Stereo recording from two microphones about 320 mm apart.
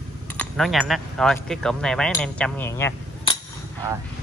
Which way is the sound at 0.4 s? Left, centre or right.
Centre.